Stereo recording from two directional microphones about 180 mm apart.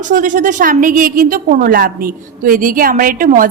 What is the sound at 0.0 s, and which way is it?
A woman's voice, 45° right (ahead or behind).